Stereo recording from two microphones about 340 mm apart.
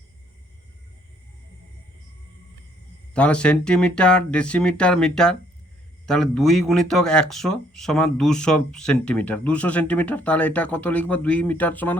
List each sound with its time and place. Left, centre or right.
3.2 s speech: centre